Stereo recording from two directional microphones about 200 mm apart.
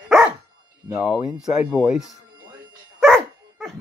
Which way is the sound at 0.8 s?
5° right (ahead or behind).